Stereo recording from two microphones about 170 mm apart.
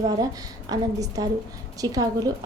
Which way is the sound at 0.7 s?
20° right (ahead or behind).